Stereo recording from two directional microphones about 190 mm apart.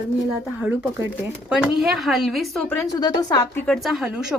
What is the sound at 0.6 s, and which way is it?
A woman's voice, 10° right (ahead or behind).